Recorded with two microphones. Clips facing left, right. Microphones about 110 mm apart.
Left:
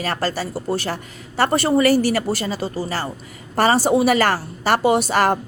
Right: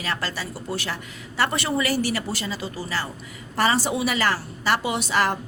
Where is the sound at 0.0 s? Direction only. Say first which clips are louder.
Left 6 dB; 40° left (ahead or behind).